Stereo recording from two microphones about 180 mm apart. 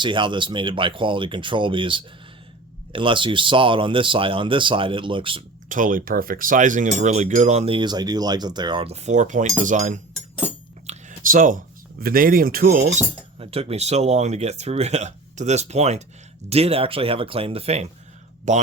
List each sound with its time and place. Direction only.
0.0 s speech: 25° right (ahead or behind)
5.6 s speech: 45° right (ahead or behind)
13.4 s speech: 35° right (ahead or behind)